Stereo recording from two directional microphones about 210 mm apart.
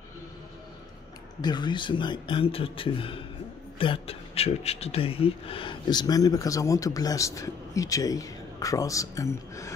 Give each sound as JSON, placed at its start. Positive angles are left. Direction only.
{"t": 1.4, "sound": "a man's voice", "side_deg": 20}